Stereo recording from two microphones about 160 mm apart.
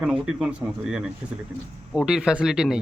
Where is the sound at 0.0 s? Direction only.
5° right (ahead or behind).